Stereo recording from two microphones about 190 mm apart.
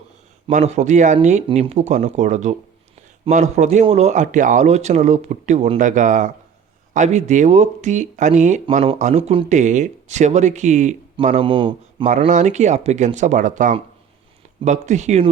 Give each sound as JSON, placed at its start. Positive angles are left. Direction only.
{"t": 0.5, "sound": "speech", "side_deg": -40}
{"t": 12.2, "sound": "speech", "side_deg": -40}